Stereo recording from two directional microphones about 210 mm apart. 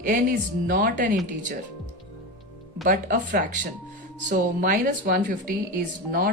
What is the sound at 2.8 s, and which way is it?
Speech, 40° right (ahead or behind).